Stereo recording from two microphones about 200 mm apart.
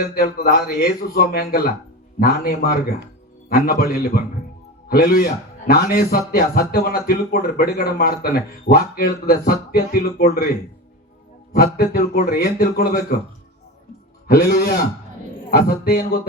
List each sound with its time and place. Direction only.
0.0 s a man's voice: 50° left (ahead or behind)
11.5 s a man's voice: 50° left (ahead or behind)
14.3 s a man's voice: 50° left (ahead or behind)